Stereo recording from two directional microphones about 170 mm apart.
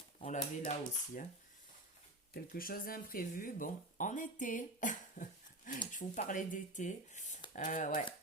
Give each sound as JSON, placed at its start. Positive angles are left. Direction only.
{"t": 0.2, "sound": "speech", "side_deg": 45}
{"t": 2.3, "sound": "speech", "side_deg": 60}